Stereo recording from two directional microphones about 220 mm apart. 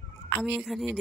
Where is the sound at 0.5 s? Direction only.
Centre (ahead or behind).